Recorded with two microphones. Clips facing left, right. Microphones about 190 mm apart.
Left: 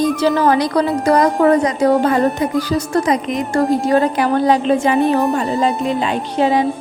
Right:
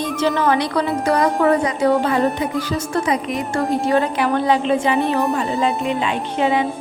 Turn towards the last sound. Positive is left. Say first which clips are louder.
# left 3 dB
turn(degrees=40)  # may be behind; listen again after turning